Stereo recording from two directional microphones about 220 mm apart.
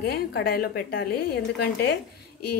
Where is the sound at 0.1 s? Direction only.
45° left (ahead or behind).